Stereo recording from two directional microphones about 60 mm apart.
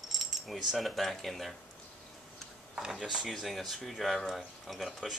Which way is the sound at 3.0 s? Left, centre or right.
Centre.